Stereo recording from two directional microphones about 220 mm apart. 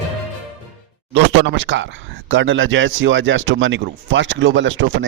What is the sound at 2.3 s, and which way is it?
A man's voice, 60° right (ahead or behind).